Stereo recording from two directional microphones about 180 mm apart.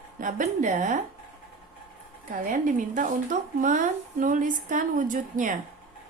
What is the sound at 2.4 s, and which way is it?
Speech, 45° right (ahead or behind).